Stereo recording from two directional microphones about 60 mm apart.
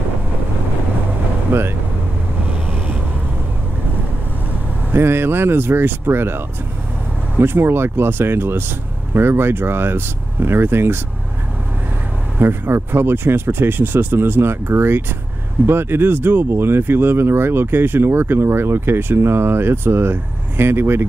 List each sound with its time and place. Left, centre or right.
1.5 s speech: right
4.9 s speech: right
12.4 s speech: right